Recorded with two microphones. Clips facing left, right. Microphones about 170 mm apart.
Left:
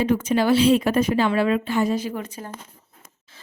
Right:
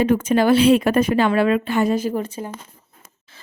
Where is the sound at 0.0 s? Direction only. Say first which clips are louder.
Right 3 dB; 55° right (ahead or behind).